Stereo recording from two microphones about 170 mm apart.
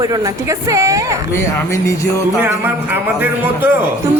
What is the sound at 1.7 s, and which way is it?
Speech, 20° left (ahead or behind).